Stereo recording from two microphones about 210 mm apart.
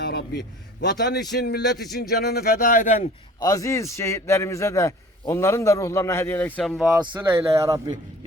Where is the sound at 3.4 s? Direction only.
15° left (ahead or behind).